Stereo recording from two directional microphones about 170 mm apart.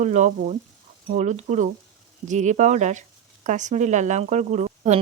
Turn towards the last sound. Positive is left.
turn(degrees=-40)  # may be behind; listen again after turning